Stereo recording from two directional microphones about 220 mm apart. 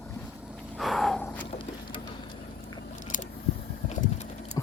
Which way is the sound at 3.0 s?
35° left (ahead or behind).